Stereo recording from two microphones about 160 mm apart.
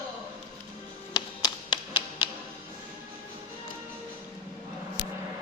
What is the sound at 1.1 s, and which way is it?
Music, 25° left (ahead or behind).